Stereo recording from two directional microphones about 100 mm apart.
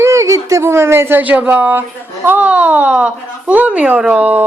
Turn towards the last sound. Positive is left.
turn(degrees=-15)  # may be behind; listen again after turning